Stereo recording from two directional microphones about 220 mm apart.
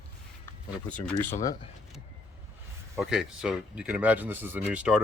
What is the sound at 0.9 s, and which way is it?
Speech, 5° left (ahead or behind).